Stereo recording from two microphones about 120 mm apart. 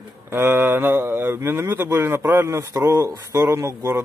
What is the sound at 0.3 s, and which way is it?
Speech, 20° right (ahead or behind).